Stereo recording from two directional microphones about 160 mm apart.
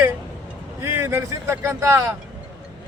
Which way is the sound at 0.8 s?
15° right (ahead or behind).